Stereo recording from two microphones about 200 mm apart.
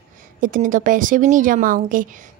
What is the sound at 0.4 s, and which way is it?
A woman's voice, 40° right (ahead or behind).